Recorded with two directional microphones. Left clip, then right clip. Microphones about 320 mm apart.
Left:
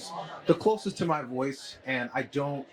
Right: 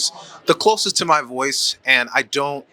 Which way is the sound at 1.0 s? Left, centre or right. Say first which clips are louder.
Right 12 dB; centre.